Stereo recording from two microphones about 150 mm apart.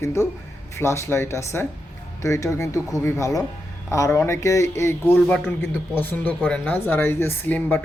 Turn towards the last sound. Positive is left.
turn(degrees=10)  # may be behind; listen again after turning